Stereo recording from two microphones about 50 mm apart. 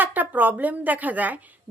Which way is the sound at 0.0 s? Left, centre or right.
Right.